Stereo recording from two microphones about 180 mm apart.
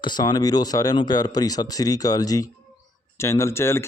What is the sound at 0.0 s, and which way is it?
Speech, 25° left (ahead or behind).